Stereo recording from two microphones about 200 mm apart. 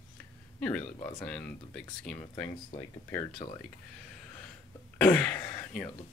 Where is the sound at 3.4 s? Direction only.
30° left (ahead or behind).